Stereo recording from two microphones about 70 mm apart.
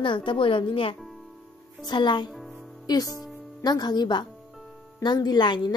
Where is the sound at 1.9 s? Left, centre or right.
Left.